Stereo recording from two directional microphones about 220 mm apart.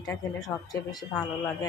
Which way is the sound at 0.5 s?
10° left (ahead or behind).